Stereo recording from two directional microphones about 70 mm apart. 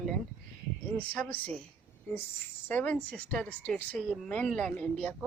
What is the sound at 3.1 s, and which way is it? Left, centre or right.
Speech, centre.